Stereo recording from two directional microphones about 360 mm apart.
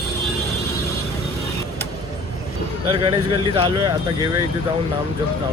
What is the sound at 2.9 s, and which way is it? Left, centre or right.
Speech, centre.